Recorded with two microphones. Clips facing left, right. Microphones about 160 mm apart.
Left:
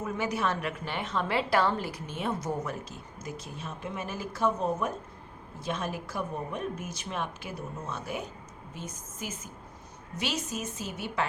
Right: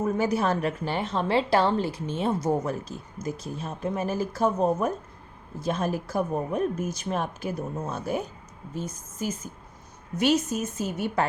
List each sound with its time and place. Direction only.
0.0 s a woman's voice: 35° right (ahead or behind)
10.2 s a woman's voice: 50° right (ahead or behind)